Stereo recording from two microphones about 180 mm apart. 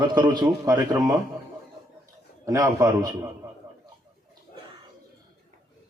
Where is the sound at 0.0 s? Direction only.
25° right (ahead or behind).